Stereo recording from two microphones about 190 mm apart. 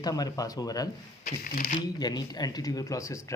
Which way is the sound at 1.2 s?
45° left (ahead or behind).